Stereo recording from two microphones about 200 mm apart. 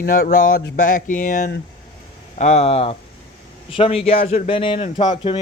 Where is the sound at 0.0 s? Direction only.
45° left (ahead or behind).